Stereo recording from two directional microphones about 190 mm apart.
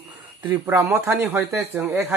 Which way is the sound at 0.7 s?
15° right (ahead or behind).